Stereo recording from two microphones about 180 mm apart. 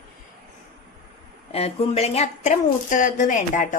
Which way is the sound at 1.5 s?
35° left (ahead or behind).